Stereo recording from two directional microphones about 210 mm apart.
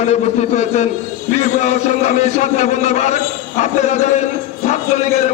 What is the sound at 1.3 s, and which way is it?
A man's voice, 35° left (ahead or behind).